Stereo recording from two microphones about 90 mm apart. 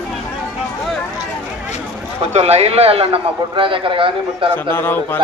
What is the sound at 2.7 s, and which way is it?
A man's voice, 90° right.